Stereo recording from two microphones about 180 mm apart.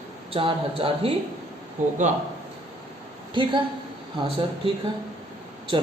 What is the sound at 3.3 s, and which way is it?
Speech, 25° right (ahead or behind).